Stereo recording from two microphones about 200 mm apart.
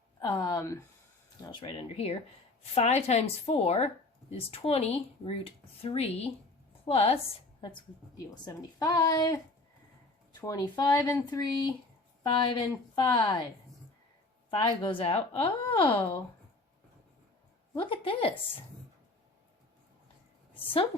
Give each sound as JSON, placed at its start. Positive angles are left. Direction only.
{"t": 0.2, "sound": "speech", "side_deg": 15}
{"t": 8.4, "sound": "a woman's voice", "side_deg": 15}
{"t": 10.4, "sound": "speech", "side_deg": 20}
{"t": 14.5, "sound": "speech", "side_deg": 25}
{"t": 17.7, "sound": "speech", "side_deg": 25}